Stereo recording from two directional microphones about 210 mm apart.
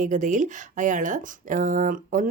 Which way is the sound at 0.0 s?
35° right (ahead or behind).